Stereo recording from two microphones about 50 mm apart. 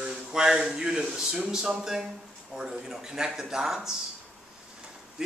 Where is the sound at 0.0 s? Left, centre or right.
Centre.